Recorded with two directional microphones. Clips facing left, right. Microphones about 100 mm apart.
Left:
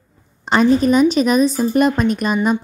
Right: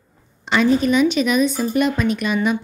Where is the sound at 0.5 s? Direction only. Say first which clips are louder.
Left 3 dB; 40° left (ahead or behind).